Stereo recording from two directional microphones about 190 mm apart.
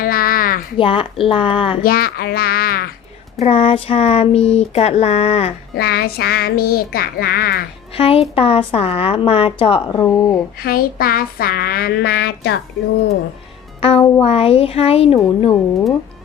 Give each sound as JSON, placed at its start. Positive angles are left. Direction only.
{"t": 0.0, "sound": "a sound", "side_deg": 50}
{"t": 0.8, "sound": "speech", "side_deg": 30}
{"t": 1.8, "sound": "speech", "side_deg": 50}
{"t": 3.4, "sound": "speech", "side_deg": 30}
{"t": 5.7, "sound": "speech", "side_deg": 55}
{"t": 7.9, "sound": "speech", "side_deg": 30}
{"t": 9.9, "sound": "speech", "side_deg": 15}
{"t": 10.6, "sound": "speech", "side_deg": 50}
{"t": 13.8, "sound": "speech", "side_deg": 30}